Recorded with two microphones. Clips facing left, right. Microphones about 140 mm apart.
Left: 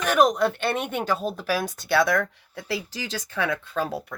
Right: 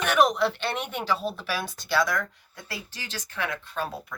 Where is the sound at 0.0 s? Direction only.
40° left (ahead or behind); by 2.2 s 60° left (ahead or behind).